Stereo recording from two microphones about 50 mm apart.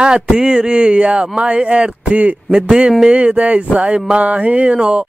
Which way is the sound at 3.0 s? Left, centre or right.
Right.